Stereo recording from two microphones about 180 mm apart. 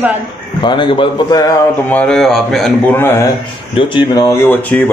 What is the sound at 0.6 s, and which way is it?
Speech, 25° left (ahead or behind).